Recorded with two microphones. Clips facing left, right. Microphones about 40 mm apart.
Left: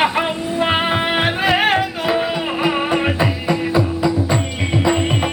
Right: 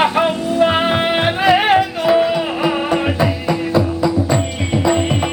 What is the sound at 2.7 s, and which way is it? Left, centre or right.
Music, left.